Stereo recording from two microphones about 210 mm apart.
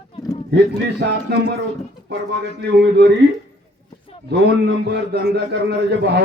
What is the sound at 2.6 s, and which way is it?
Speech, 55° right (ahead or behind).